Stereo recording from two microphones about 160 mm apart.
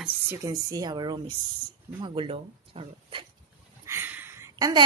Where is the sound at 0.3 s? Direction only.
20° right (ahead or behind); by 3.3 s 35° right (ahead or behind).